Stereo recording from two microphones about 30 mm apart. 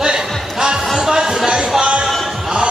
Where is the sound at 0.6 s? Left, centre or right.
Right.